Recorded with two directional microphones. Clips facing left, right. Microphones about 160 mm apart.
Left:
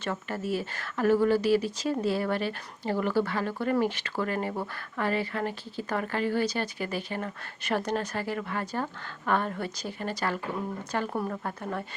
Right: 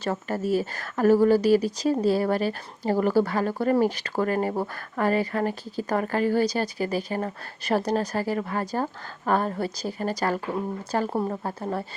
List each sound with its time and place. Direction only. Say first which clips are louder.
0.0 s speech: right 5 dB; 40° right (ahead or behind)